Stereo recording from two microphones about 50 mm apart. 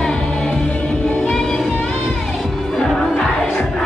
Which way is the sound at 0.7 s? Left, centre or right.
Centre.